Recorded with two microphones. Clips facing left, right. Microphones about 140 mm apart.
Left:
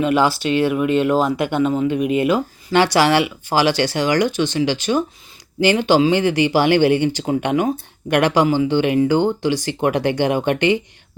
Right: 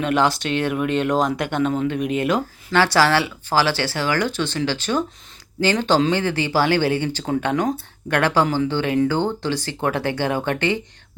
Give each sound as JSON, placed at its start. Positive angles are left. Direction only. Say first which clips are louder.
{"t": 0.0, "sound": "speech", "louder": "left 3 dB", "side_deg": 5}
{"t": 2.7, "sound": "speech", "louder": "left 3 dB", "side_deg": 15}